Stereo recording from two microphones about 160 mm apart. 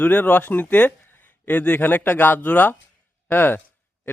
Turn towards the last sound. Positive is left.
turn(degrees=15)  # may be behind; listen again after turning